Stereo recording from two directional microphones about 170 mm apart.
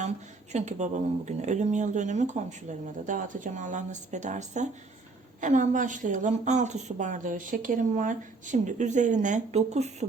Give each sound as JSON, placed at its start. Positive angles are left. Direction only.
{"t": 0.5, "sound": "a woman's voice", "side_deg": -45}